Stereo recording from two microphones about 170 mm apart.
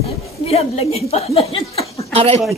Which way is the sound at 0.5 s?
35° left (ahead or behind).